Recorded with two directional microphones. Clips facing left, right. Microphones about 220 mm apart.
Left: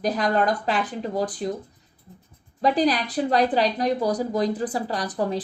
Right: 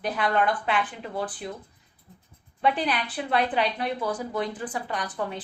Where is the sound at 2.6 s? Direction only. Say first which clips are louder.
Left 5 dB; 35° left (ahead or behind).